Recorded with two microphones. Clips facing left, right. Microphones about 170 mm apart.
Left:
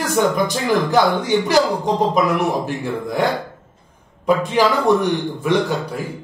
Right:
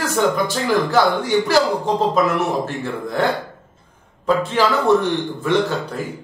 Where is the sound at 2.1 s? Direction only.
15° left (ahead or behind).